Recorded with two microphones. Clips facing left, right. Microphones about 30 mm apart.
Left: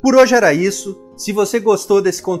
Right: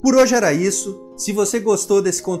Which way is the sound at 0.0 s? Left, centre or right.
Left.